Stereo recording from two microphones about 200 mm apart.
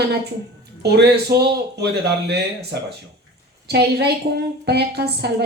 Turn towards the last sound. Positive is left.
turn(degrees=-55)  # may be behind; listen again after turning